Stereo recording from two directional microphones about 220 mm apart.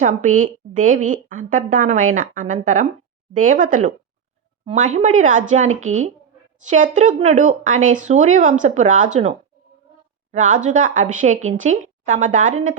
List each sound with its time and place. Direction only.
0.0 s a woman's voice: 35° right (ahead or behind)
10.3 s a woman's voice: 35° right (ahead or behind)